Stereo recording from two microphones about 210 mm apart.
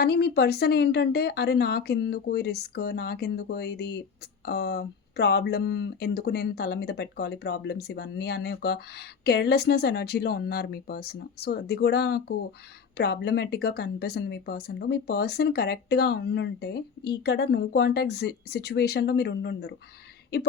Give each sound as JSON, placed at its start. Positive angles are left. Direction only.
{"t": 0.0, "sound": "speech", "side_deg": 50}